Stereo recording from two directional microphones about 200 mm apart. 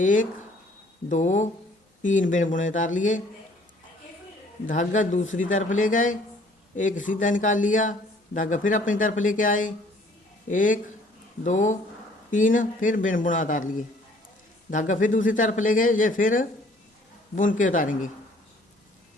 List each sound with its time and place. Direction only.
0.0 s a man's voice: 40° left (ahead or behind)
4.6 s a man's voice: 40° left (ahead or behind)